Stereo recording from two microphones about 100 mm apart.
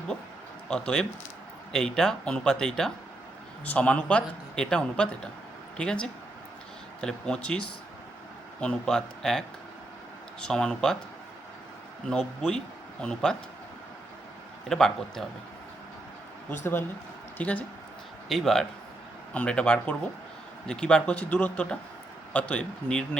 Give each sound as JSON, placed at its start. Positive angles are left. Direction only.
{"t": 0.7, "sound": "speech", "side_deg": 10}
{"t": 8.6, "sound": "speech", "side_deg": 10}
{"t": 10.4, "sound": "speech", "side_deg": 10}
{"t": 12.0, "sound": "speech", "side_deg": 5}
{"t": 14.7, "sound": "a man's voice", "side_deg": 5}
{"t": 16.5, "sound": "speech", "side_deg": 25}
{"t": 18.3, "sound": "a man's voice", "side_deg": 5}